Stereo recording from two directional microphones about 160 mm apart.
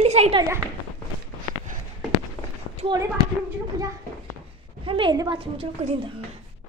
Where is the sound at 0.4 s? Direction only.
15° right (ahead or behind).